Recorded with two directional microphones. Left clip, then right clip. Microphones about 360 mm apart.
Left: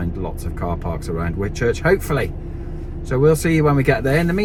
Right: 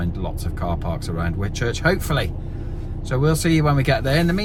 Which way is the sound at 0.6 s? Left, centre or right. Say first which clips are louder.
Left 1 dB; right.